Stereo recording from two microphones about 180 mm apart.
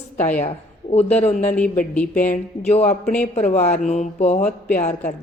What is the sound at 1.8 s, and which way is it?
Speech, 10° left (ahead or behind).